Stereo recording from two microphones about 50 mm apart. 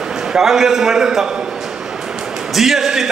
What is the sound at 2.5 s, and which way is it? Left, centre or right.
Speech, centre.